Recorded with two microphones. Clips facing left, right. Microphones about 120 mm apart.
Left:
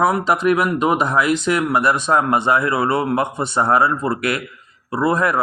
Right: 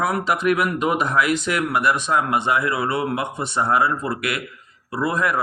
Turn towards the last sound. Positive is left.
turn(degrees=35)  # may be behind; listen again after turning